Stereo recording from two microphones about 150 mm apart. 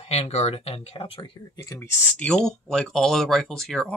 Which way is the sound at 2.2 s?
5° left (ahead or behind).